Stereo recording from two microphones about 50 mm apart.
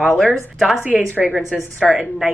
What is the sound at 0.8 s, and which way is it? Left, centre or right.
Speech, right.